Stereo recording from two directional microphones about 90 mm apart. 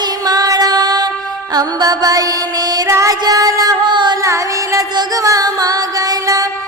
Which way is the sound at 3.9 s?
60° right (ahead or behind).